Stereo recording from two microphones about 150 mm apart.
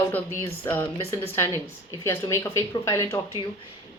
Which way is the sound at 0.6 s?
15° left (ahead or behind).